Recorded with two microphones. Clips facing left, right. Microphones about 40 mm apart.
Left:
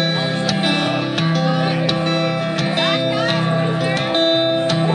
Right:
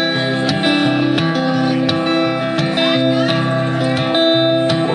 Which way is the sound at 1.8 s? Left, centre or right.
Centre.